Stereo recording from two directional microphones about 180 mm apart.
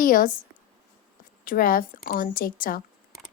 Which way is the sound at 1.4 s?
50° left (ahead or behind).